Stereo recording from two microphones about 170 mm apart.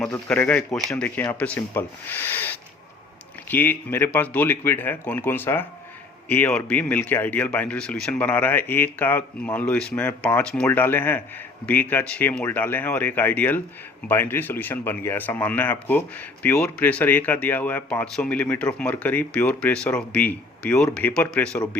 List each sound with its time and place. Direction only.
0.3 s speech: 10° left (ahead or behind)